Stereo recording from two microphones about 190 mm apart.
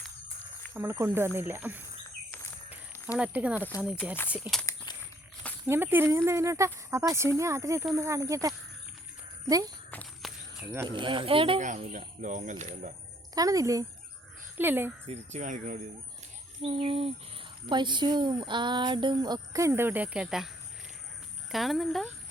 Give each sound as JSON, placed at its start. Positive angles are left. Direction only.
{"t": 0.7, "sound": "speech", "side_deg": -10}
{"t": 2.6, "sound": "a sound", "side_deg": -10}
{"t": 4.3, "sound": "speech", "side_deg": -5}
{"t": 4.9, "sound": "a sound", "side_deg": 20}
{"t": 5.6, "sound": "speech", "side_deg": -10}
{"t": 9.9, "sound": "walk", "side_deg": 5}
{"t": 10.7, "sound": "speech", "side_deg": -20}
{"t": 11.6, "sound": "speech", "side_deg": -40}
{"t": 13.3, "sound": "speech", "side_deg": -20}
{"t": 15.0, "sound": "speech", "side_deg": -35}
{"t": 16.6, "sound": "speech", "side_deg": -30}
{"t": 21.5, "sound": "speech", "side_deg": 0}